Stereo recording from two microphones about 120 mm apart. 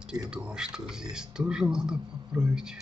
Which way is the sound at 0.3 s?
10° right (ahead or behind).